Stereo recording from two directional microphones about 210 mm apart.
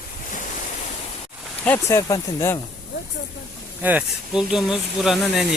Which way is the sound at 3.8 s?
5° right (ahead or behind).